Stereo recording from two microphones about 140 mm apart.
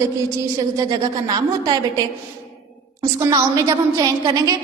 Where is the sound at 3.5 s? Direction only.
25° right (ahead or behind).